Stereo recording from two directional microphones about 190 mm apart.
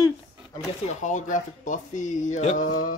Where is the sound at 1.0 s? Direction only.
40° left (ahead or behind).